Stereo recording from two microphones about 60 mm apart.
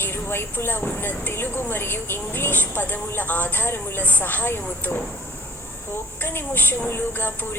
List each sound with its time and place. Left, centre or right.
0.0 s a woman's voice: left
6.2 s a woman's voice: left